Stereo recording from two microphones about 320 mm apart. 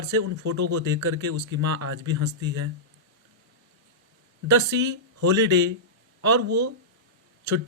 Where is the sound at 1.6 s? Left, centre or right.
Right.